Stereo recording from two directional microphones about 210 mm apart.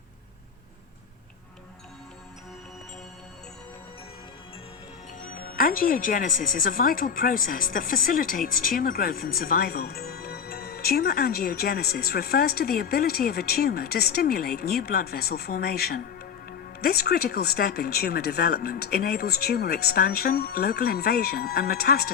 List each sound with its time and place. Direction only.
5.3 s speech: 45° left (ahead or behind)